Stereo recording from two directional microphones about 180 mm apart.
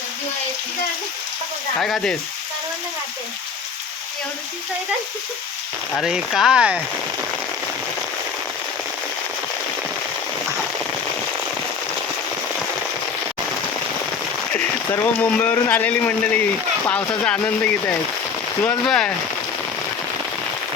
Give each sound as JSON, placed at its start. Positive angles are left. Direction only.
{"t": 1.8, "sound": "speech", "side_deg": 0}
{"t": 5.9, "sound": "speech", "side_deg": 0}
{"t": 14.5, "sound": "speech", "side_deg": 10}